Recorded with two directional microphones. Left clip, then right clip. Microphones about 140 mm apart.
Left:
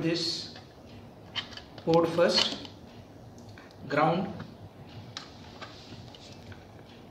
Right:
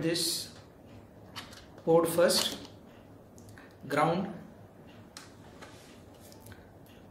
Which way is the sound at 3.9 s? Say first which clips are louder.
Left 2 dB; 35° right (ahead or behind).